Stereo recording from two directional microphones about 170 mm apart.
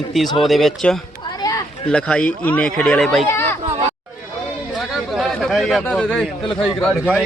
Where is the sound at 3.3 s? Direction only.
15° left (ahead or behind).